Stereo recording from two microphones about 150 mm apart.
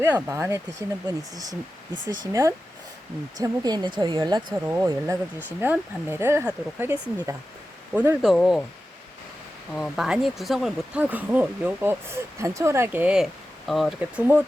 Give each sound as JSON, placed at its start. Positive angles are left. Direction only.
{"t": 0.0, "sound": "speech", "side_deg": -15}
{"t": 7.9, "sound": "speech", "side_deg": -15}
{"t": 8.2, "sound": "speech", "side_deg": 0}
{"t": 9.7, "sound": "speech", "side_deg": 0}
{"t": 14.2, "sound": "speech", "side_deg": -10}